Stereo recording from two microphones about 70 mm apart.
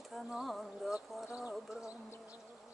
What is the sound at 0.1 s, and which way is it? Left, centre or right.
Lullaby, centre.